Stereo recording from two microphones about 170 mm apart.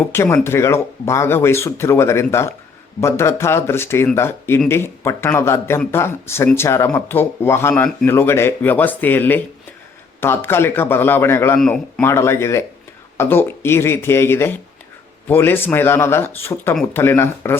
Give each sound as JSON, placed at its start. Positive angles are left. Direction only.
{"t": 0.1, "sound": "speech", "side_deg": 15}